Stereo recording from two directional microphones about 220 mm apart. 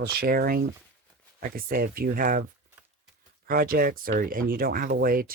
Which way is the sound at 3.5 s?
40° right (ahead or behind).